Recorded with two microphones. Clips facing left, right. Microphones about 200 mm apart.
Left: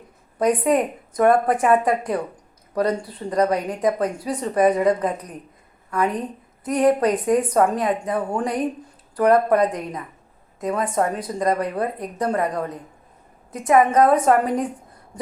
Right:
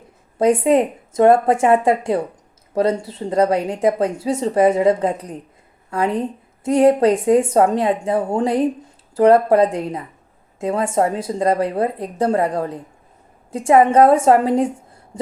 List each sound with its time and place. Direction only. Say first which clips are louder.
0.3 s a woman's voice: right 4 dB; 25° right (ahead or behind)